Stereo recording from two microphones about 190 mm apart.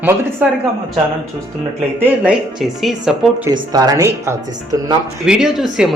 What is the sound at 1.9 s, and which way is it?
Speech, 10° right (ahead or behind).